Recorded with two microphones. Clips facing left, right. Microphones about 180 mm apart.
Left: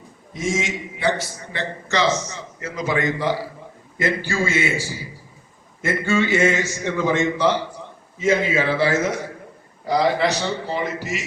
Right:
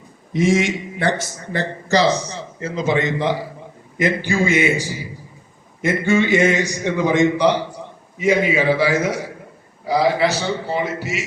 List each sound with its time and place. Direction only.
0.3 s a man's voice: 65° right (ahead or behind); by 11.2 s centre (ahead or behind)